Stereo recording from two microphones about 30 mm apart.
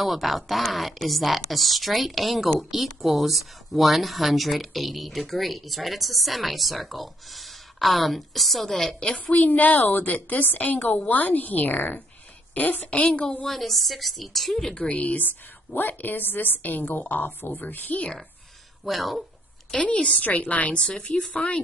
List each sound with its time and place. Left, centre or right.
0.0 s a woman's voice: centre
9.1 s a woman's voice: left
12.8 s a woman's voice: left
13.5 s a woman's voice: centre
15.0 s a woman's voice: left
17.8 s speech: left
18.9 s a woman's voice: centre
19.8 s a woman's voice: left
20.2 s a woman's voice: left